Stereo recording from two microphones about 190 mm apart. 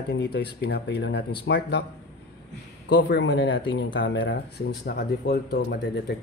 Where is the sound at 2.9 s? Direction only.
65° left (ahead or behind).